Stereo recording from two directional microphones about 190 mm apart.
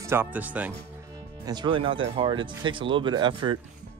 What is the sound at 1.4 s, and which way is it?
Speech, 20° right (ahead or behind).